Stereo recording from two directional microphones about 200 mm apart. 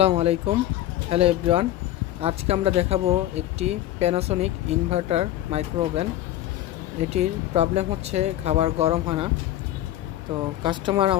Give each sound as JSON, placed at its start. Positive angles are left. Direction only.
{"t": 0.2, "sound": "speech", "side_deg": -30}
{"t": 10.6, "sound": "speech", "side_deg": -25}